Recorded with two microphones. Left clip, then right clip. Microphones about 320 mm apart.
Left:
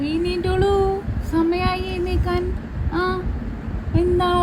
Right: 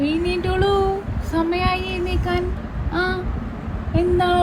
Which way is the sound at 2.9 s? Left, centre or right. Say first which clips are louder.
Even; left.